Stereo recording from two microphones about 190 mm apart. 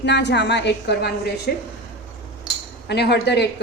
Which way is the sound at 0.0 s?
65° left (ahead or behind).